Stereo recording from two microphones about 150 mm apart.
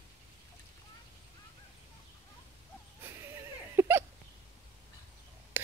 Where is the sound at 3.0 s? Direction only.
15° right (ahead or behind).